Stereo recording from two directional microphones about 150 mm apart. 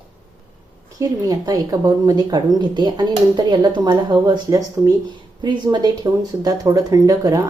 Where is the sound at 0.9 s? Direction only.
25° right (ahead or behind).